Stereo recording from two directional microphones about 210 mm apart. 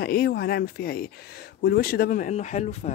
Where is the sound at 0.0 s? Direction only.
50° left (ahead or behind).